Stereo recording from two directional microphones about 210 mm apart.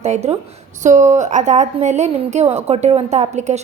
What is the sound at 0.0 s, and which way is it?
A woman's voice, 30° right (ahead or behind).